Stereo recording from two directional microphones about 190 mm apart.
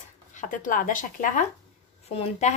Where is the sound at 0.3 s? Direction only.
40° left (ahead or behind).